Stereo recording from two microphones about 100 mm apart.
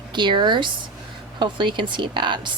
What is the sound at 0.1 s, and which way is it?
Speech, 50° right (ahead or behind).